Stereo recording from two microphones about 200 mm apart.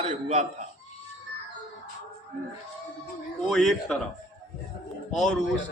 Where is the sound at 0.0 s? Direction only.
35° right (ahead or behind).